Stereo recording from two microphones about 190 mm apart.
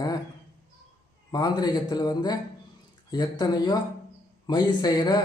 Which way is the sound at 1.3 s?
20° left (ahead or behind).